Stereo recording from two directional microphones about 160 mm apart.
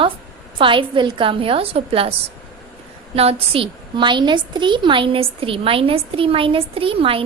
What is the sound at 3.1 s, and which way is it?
A woman's voice, 40° right (ahead or behind).